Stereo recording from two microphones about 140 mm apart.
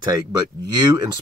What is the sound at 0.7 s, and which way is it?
Speech, 30° right (ahead or behind).